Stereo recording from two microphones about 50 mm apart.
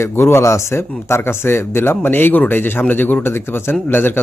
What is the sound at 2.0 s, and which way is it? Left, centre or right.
A man's voice, left.